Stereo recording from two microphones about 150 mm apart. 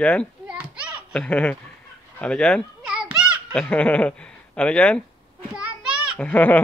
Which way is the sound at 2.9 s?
5° right (ahead or behind).